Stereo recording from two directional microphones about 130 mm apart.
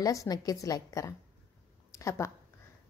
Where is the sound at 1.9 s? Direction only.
25° left (ahead or behind).